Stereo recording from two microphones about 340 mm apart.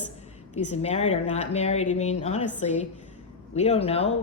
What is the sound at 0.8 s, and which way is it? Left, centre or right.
A woman's voice, centre.